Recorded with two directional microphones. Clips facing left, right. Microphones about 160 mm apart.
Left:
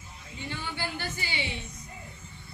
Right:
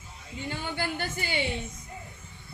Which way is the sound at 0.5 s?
50° right (ahead or behind).